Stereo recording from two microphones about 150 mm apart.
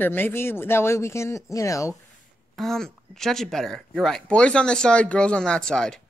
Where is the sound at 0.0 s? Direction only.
15° left (ahead or behind).